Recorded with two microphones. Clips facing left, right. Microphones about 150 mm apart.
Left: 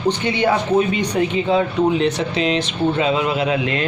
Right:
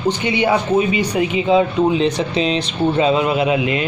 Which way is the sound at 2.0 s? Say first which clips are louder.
Right 1 dB; 25° right (ahead or behind).